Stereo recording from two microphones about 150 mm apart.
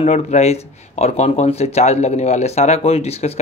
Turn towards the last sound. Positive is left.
turn(degrees=45)  # may be behind; listen again after turning